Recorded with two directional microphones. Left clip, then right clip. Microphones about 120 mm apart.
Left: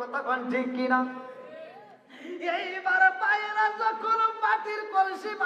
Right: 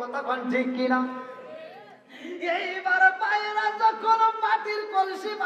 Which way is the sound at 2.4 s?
30° left (ahead or behind).